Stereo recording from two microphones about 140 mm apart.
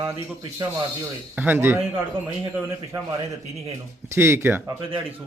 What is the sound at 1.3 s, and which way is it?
Speech, 10° right (ahead or behind).